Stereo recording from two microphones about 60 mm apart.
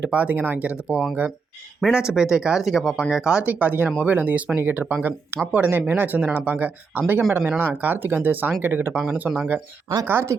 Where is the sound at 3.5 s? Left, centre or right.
Right.